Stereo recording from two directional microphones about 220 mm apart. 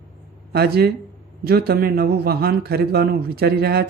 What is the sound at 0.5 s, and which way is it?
A man's voice, 45° right (ahead or behind).